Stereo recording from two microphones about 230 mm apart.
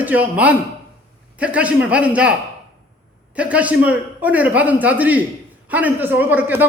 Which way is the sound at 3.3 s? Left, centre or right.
Centre.